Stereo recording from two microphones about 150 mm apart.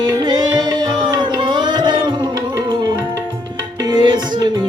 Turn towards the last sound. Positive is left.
turn(degrees=-30)  # may be behind; listen again after turning